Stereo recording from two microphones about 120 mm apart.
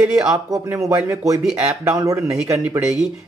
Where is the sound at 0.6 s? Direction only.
25° right (ahead or behind).